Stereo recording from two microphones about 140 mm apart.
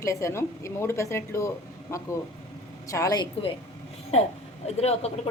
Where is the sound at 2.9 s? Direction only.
25° left (ahead or behind).